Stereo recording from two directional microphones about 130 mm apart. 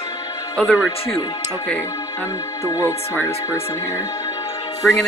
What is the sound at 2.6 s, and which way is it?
Speech, 20° left (ahead or behind).